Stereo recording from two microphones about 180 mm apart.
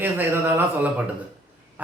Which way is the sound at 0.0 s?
10° right (ahead or behind).